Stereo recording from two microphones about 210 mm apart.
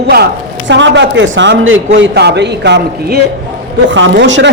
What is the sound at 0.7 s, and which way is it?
A man's voice, 60° right (ahead or behind).